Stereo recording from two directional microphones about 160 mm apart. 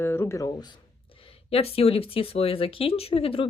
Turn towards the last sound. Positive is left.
turn(degrees=35)  # may be behind; listen again after turning